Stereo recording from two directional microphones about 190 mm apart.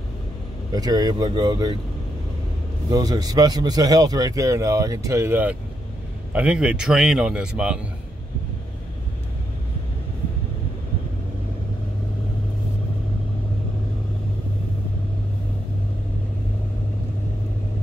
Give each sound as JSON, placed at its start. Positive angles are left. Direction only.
{"t": 0.7, "sound": "speech", "side_deg": -20}
{"t": 2.9, "sound": "speech", "side_deg": -20}